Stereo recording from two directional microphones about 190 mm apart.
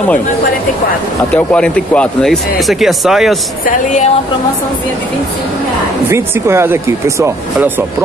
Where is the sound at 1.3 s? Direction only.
10° left (ahead or behind).